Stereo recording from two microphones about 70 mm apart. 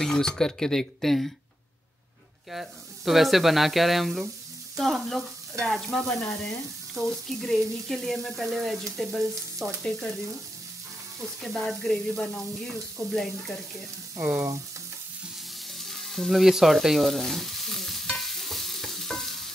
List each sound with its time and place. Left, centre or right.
0.0 s speech: centre
2.5 s frying: centre
9.8 s speech: centre
11.4 s frying: centre
11.9 s speech: centre
15.8 s frying: centre